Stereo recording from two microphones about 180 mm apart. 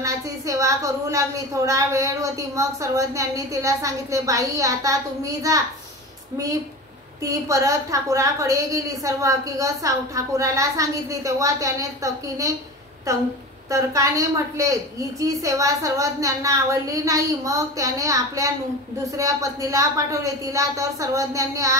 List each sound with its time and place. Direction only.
0.0 s a woman's voice: 20° right (ahead or behind)
7.2 s a woman's voice: 20° right (ahead or behind)